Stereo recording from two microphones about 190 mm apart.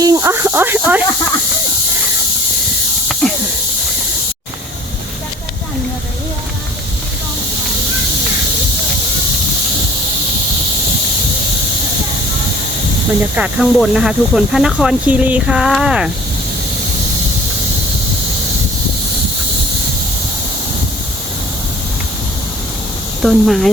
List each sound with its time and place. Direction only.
0.0 s speech: 15° right (ahead or behind)
3.1 s a sound: centre (ahead or behind)
13.3 s speech: 5° right (ahead or behind)
23.2 s speech: centre (ahead or behind)